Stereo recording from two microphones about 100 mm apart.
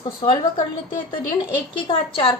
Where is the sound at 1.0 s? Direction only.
50° left (ahead or behind).